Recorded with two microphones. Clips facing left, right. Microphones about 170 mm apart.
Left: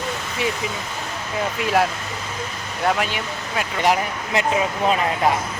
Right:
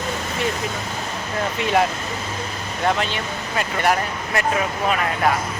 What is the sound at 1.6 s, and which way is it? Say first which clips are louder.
Speech: right 1 dB; centre (ahead or behind).